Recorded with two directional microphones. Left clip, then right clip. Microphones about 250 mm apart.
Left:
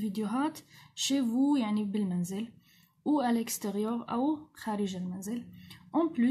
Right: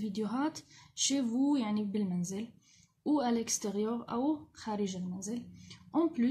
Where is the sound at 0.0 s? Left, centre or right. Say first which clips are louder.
Left 2 dB; centre.